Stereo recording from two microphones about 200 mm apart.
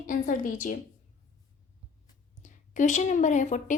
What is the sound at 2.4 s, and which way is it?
A woman's voice, 40° left (ahead or behind).